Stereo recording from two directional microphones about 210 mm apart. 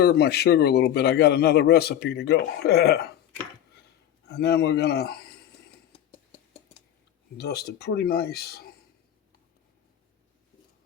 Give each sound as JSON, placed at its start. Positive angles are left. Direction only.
{"t": 0.0, "sound": "a man's voice", "side_deg": 50}
{"t": 4.3, "sound": "a man's voice", "side_deg": 50}
{"t": 5.9, "sound": "a sound", "side_deg": 25}
{"t": 7.3, "sound": "a man's voice", "side_deg": 50}